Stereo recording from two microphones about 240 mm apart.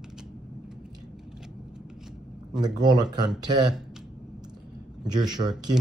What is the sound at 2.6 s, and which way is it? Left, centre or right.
Speech, centre.